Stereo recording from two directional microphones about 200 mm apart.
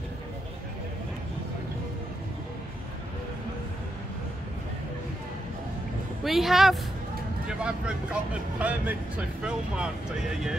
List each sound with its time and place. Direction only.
6.2 s speech: centre (ahead or behind)